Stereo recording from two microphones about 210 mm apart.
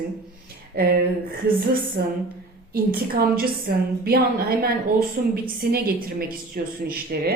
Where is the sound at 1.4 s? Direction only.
45° right (ahead or behind).